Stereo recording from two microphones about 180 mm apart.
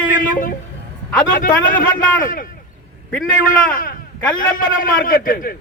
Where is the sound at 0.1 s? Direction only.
50° left (ahead or behind).